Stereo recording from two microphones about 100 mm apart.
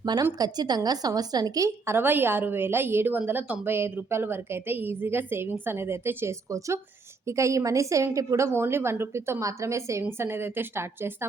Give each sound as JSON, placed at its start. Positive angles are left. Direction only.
{"t": 0.0, "sound": "a woman's voice", "side_deg": -45}